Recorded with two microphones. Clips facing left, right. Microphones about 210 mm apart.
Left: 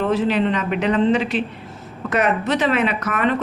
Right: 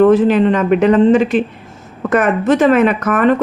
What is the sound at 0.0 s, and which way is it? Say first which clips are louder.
Speech: right 9 dB; 50° right (ahead or behind).